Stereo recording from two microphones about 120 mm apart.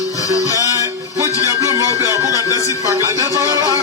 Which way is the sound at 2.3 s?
30° left (ahead or behind).